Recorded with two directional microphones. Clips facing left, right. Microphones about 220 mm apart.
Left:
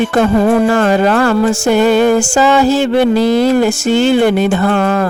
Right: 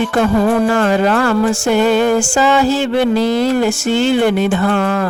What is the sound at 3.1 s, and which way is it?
Speech, 10° left (ahead or behind).